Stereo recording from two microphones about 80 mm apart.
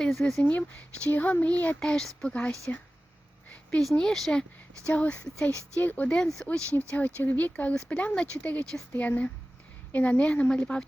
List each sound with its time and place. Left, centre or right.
0.0 s speech: centre
0.4 s speech: centre
1.8 s speech: centre
3.8 s speech: centre; by 6.1 s left
6.1 s speech: centre
6.7 s speech: left